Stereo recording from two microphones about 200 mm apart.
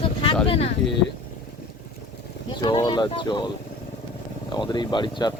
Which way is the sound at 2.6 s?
20° left (ahead or behind).